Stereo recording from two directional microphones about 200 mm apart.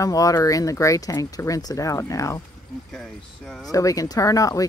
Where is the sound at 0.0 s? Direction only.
15° left (ahead or behind).